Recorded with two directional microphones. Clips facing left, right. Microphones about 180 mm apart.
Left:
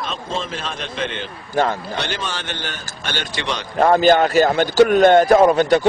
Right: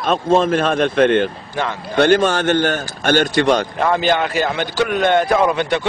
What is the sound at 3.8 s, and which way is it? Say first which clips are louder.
A man's voice: left 4 dB; 40° left (ahead or behind).